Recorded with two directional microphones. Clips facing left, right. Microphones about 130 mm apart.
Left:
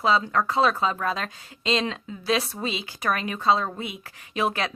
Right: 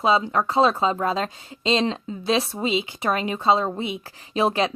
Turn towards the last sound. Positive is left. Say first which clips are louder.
# right 5 dB
turn(degrees=-25)  # may be behind; listen again after turning